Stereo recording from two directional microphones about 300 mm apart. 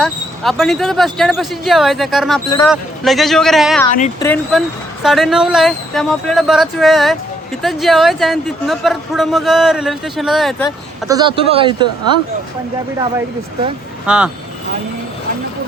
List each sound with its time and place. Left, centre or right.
0.0 s speech: centre
11.1 s speech: centre
14.1 s speech: centre